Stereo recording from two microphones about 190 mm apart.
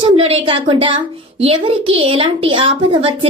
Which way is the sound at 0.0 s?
30° right (ahead or behind).